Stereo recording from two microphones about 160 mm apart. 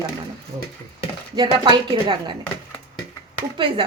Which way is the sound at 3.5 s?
35° right (ahead or behind).